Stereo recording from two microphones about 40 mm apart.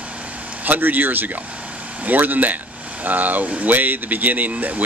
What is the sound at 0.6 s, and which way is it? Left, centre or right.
Speech, right.